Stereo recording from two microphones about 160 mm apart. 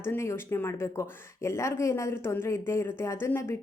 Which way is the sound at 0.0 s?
15° left (ahead or behind).